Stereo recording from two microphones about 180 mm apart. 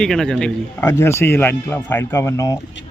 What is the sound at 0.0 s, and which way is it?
A man's voice, centre (ahead or behind).